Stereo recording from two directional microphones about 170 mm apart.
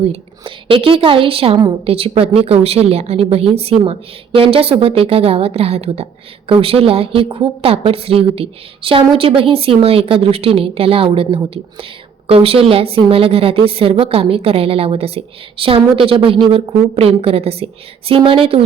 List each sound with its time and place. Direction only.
0.0 s a woman's voice: 35° right (ahead or behind)